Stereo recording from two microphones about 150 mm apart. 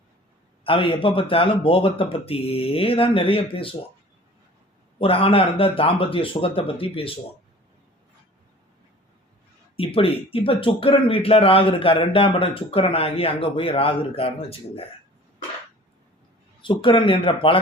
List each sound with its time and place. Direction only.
0.6 s a man's voice: 35° left (ahead or behind)
4.9 s a man's voice: 40° left (ahead or behind)
9.7 s a man's voice: 40° left (ahead or behind)
16.6 s a man's voice: 35° left (ahead or behind)